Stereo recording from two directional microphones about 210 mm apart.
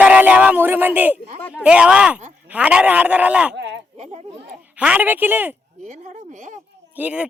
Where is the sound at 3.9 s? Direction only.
30° right (ahead or behind).